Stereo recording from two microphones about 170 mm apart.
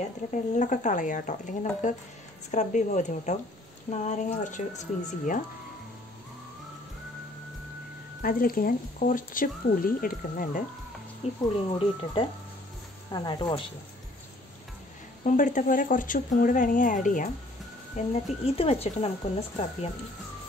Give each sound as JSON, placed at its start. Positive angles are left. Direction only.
{"t": 0.0, "sound": "speech", "side_deg": 45}
{"t": 8.2, "sound": "speech", "side_deg": 55}
{"t": 11.2, "sound": "speech", "side_deg": 35}
{"t": 15.2, "sound": "speech", "side_deg": 50}
{"t": 17.9, "sound": "speech", "side_deg": 35}